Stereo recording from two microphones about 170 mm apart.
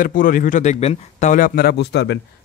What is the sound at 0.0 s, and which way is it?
Speech, 55° left (ahead or behind).